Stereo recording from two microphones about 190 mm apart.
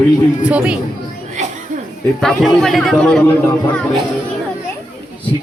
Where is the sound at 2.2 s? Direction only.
Centre (ahead or behind).